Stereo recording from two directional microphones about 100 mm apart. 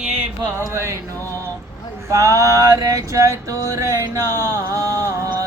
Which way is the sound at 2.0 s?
30° right (ahead or behind).